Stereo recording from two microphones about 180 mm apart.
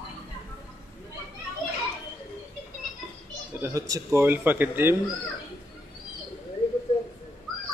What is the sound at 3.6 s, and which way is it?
A man's voice, 15° right (ahead or behind).